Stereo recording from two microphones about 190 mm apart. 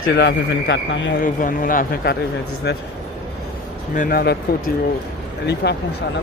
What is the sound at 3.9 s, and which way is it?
Speech, 50° left (ahead or behind).